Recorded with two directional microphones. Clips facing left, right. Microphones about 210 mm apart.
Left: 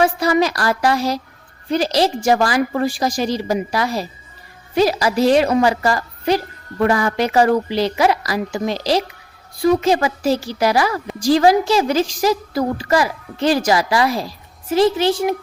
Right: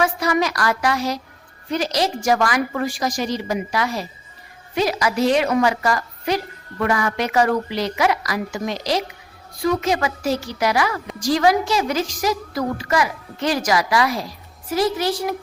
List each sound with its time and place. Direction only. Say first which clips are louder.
0.0 s a woman's voice: left 4 dB; 30° left (ahead or behind)